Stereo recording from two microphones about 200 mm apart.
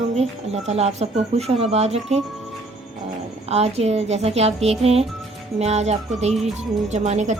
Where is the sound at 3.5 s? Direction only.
30° right (ahead or behind).